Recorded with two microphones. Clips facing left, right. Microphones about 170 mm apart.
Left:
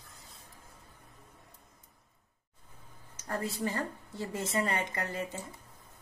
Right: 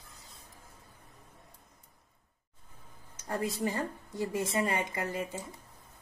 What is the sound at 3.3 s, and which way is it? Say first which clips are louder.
A woman's voice: right 1 dB; 15° right (ahead or behind).